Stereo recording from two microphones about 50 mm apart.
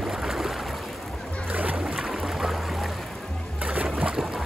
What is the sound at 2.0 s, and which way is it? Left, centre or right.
Music, centre.